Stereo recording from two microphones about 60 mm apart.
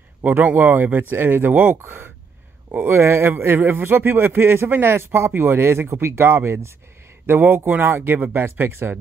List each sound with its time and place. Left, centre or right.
0.2 s a man's voice: right
1.8 s a man's voice: right